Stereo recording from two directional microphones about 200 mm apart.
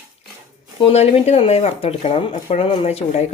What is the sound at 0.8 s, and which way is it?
Speech, 30° left (ahead or behind).